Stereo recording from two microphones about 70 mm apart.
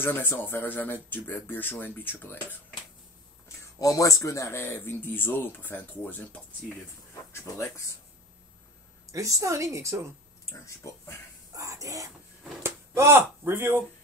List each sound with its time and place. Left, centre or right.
0.0 s speech: left
3.6 s speech: left
7.3 s speech: left
9.1 s a woman's voice: right
10.5 s speech: left
11.5 s speech: right
12.6 s speech: right